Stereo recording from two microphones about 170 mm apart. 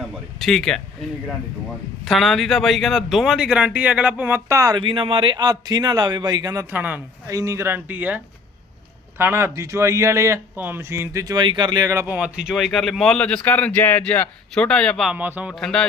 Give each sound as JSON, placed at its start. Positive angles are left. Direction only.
{"t": 0.3, "sound": "speech", "side_deg": 0}
{"t": 2.0, "sound": "speech", "side_deg": 0}
{"t": 4.8, "sound": "a man's voice", "side_deg": -30}